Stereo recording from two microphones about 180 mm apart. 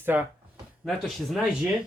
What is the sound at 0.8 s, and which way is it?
Speech, centre (ahead or behind).